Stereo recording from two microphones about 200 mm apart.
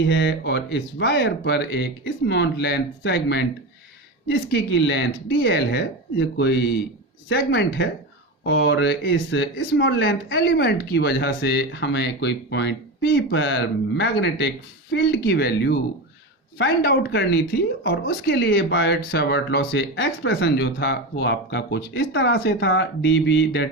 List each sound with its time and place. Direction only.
0.1 s speech: 65° left (ahead or behind)